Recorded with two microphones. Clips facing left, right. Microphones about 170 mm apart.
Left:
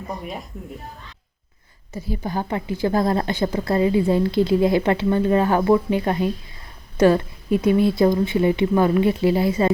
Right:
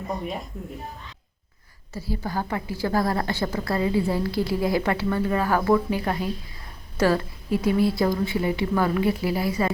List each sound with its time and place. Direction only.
0.1 s speech: centre (ahead or behind)
1.9 s a woman's voice: 20° left (ahead or behind)